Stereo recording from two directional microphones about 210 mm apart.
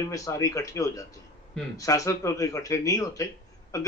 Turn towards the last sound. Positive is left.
turn(degrees=15)  # may be behind; listen again after turning